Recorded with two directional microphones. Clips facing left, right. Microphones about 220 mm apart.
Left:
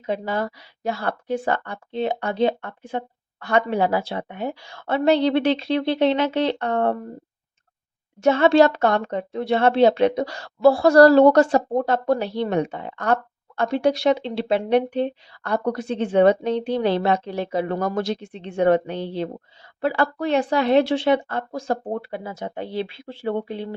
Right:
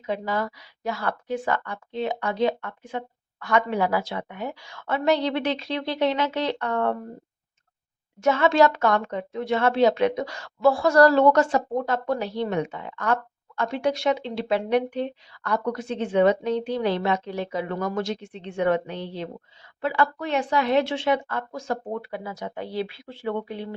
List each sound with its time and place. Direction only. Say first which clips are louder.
0.0 s a woman's voice: left 2 dB; 30° left (ahead or behind)
8.2 s speech: left 4 dB; 30° left (ahead or behind)